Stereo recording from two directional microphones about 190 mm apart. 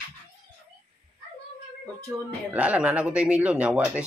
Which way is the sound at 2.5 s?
5° right (ahead or behind).